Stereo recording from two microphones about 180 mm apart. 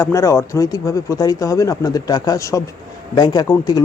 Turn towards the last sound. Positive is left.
turn(degrees=20)  # may be behind; listen again after turning